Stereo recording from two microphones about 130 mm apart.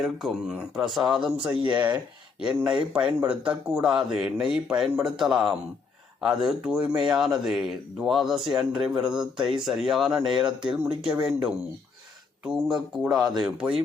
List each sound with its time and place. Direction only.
0.0 s speech: centre (ahead or behind)
2.6 s speech: 5° right (ahead or behind)
13.1 s speech: 30° right (ahead or behind)
13.4 s speech: 5° right (ahead or behind)